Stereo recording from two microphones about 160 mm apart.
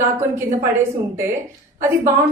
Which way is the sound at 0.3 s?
15° right (ahead or behind).